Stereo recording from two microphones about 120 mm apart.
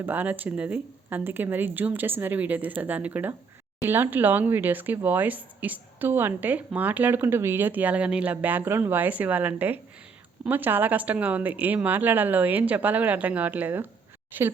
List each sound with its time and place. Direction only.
0.0 s speech: 15° right (ahead or behind)